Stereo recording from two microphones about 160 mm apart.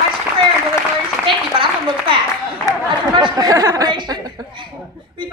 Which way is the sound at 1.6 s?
30° right (ahead or behind).